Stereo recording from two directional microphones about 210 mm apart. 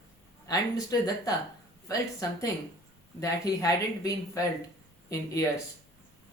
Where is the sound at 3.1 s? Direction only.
15° left (ahead or behind).